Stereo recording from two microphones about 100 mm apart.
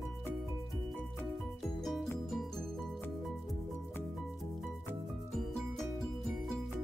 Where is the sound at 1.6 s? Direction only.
Centre (ahead or behind).